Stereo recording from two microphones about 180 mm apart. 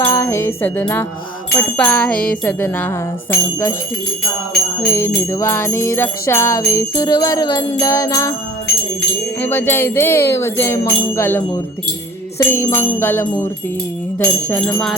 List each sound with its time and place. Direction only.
0.0 s music: 15° left (ahead or behind)
1.7 s jingle bell: 10° left (ahead or behind)
4.9 s jingle bell: 15° left (ahead or behind)
9.4 s jingle bell: 10° left (ahead or behind)